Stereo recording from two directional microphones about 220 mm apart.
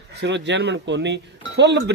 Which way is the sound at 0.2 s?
50° right (ahead or behind).